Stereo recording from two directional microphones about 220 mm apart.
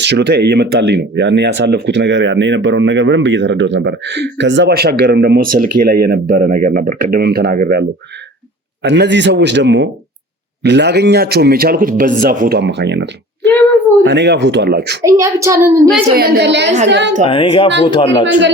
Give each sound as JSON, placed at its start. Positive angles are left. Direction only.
{"t": 0.0, "sound": "speech", "side_deg": -50}
{"t": 15.0, "sound": "a woman's voice", "side_deg": -15}
{"t": 16.0, "sound": "speech", "side_deg": -45}
{"t": 17.2, "sound": "speech", "side_deg": 25}